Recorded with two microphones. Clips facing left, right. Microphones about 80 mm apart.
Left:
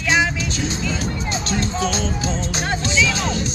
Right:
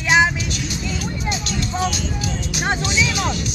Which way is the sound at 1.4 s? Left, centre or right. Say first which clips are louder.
Left 2 dB; left.